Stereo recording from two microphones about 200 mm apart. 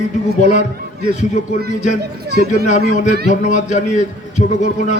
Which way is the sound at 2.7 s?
35° left (ahead or behind).